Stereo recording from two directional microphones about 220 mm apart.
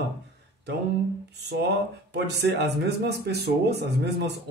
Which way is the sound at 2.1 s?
50° right (ahead or behind).